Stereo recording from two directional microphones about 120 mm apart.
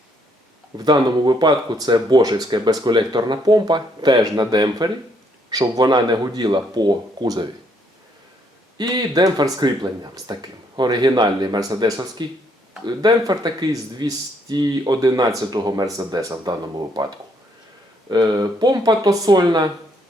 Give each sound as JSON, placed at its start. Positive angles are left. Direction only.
{"t": 0.8, "sound": "speech", "side_deg": -35}
{"t": 8.8, "sound": "speech", "side_deg": -35}